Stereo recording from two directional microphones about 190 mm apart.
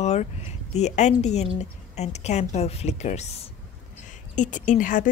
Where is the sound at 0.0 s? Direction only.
35° left (ahead or behind).